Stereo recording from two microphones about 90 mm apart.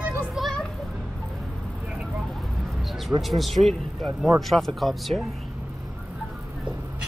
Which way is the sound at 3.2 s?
Centre (ahead or behind).